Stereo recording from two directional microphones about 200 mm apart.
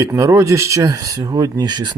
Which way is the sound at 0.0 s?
15° right (ahead or behind).